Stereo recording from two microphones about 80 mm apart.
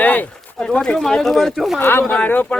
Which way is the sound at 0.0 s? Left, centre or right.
Centre.